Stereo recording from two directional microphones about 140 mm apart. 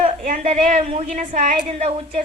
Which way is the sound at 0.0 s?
55° right (ahead or behind).